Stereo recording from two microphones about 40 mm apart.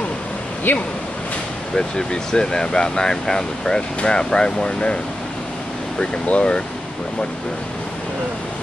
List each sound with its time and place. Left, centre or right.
0.7 s speech: left
1.8 s speech: centre
6.2 s speech: left